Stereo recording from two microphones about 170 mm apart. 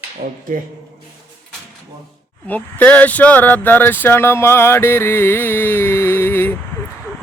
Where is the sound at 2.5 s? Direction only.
10° left (ahead or behind).